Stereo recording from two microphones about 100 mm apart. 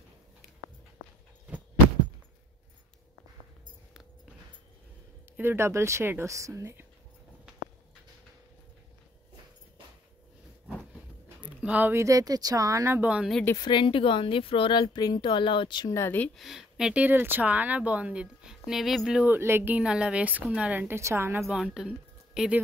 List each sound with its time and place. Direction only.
5.4 s a woman's voice: 25° right (ahead or behind)
11.4 s a sound: 15° right (ahead or behind)
11.9 s speech: 30° right (ahead or behind)
13.0 s speech: 10° right (ahead or behind)
13.6 s speech: 50° left (ahead or behind)
15.9 s speech: 30° left (ahead or behind)
16.3 s speech: 5° right (ahead or behind)
19.2 s a woman's voice: 20° right (ahead or behind)
21.5 s speech: 5° right (ahead or behind)